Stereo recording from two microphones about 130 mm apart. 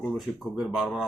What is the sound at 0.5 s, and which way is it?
Speech, 5° right (ahead or behind).